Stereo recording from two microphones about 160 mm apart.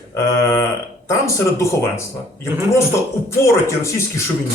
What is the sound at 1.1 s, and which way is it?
A man's voice, 20° left (ahead or behind).